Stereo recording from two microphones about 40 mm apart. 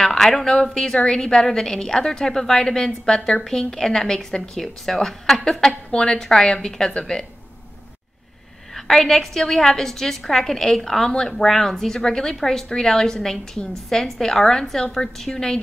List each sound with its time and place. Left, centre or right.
0.0 s a sound: centre
0.6 s a woman's voice: centre
2.9 s a woman's voice: centre
3.3 s a woman's voice: centre
8.7 s a woman's voice: centre